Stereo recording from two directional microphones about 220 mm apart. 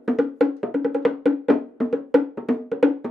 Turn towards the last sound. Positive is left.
turn(degrees=0)  # may be behind; listen again after turning